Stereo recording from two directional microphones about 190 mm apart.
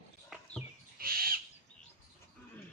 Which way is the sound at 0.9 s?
50° right (ahead or behind).